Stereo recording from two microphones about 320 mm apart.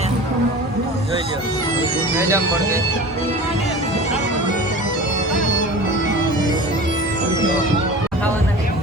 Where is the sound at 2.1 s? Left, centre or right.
Centre.